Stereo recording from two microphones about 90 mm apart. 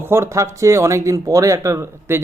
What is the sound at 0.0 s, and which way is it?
A man's voice, 30° right (ahead or behind).